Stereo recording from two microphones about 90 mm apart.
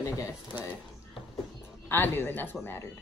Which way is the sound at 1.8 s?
20° left (ahead or behind).